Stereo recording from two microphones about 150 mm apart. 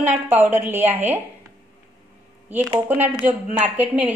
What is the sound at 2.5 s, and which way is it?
A woman's voice, 10° right (ahead or behind).